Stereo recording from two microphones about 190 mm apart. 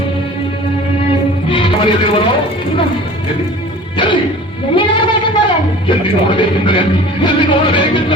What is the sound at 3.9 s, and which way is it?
Music, 25° left (ahead or behind).